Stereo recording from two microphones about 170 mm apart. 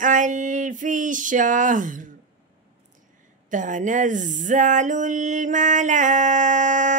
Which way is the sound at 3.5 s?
50° right (ahead or behind).